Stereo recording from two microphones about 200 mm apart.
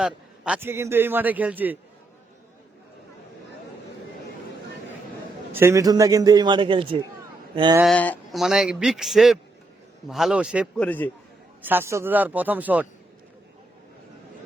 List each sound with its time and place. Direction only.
0.0 s a man's voice: 5° right (ahead or behind)
5.5 s a man's voice: 15° right (ahead or behind)
7.9 s speech: 5° left (ahead or behind)
10.8 s a man's voice: 10° left (ahead or behind)
11.6 s a man's voice: 10° right (ahead or behind)